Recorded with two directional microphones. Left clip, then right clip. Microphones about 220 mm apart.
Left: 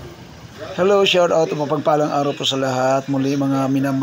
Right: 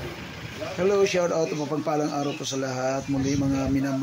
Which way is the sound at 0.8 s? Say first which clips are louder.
Left 8 dB; 20° left (ahead or behind).